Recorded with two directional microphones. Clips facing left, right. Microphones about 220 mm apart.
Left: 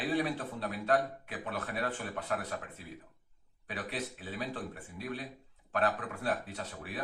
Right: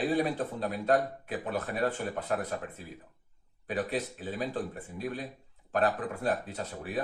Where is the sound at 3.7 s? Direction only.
40° right (ahead or behind).